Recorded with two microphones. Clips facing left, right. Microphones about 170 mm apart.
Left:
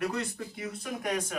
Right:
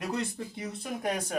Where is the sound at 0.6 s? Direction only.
30° right (ahead or behind).